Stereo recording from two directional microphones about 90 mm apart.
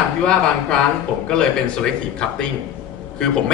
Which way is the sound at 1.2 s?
10° left (ahead or behind).